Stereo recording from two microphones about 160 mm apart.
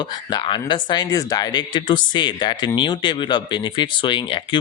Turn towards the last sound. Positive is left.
turn(degrees=30)  # may be behind; listen again after turning